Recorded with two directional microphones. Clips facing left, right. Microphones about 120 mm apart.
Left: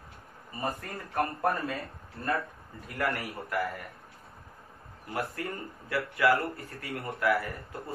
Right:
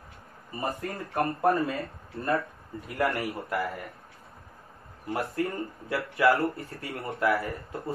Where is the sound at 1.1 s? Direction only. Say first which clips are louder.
Right 4 dB; 25° right (ahead or behind).